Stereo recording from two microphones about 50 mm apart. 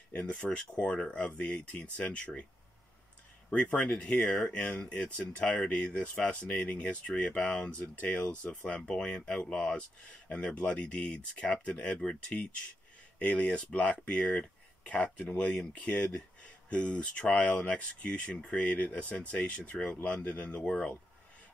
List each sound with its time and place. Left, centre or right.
0.1 s speech: left
3.4 s speech: left
8.8 s speech: centre
13.2 s speech: left
13.5 s speech: centre
13.7 s speech: left